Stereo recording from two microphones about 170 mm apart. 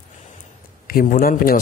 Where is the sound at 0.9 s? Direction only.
55° left (ahead or behind).